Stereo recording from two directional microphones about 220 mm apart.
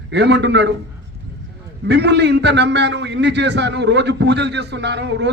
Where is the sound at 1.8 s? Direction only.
50° right (ahead or behind).